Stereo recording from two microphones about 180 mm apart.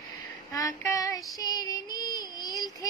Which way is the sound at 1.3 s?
20° left (ahead or behind).